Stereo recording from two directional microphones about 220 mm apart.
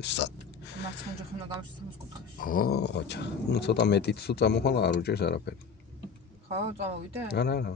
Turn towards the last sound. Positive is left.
turn(degrees=45)  # may be behind; listen again after turning